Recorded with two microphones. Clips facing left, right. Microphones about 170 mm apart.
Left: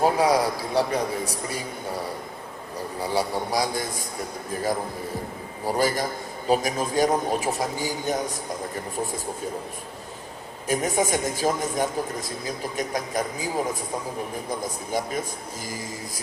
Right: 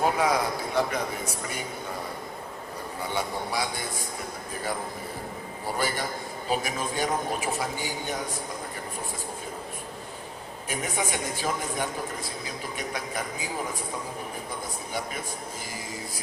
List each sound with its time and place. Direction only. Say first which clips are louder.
0.0 s a man's voice: left 4 dB; 35° left (ahead or behind)
3.0 s a man's voice: left 5 dB; 35° left (ahead or behind)
5.6 s a man's voice: left 6 dB; 40° left (ahead or behind)
10.7 s a man's voice: left 7 dB; 40° left (ahead or behind)
14.6 s a man's voice: left 5 dB; 40° left (ahead or behind)